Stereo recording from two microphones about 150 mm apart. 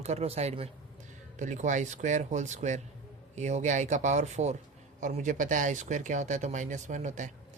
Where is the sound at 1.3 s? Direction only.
55° right (ahead or behind).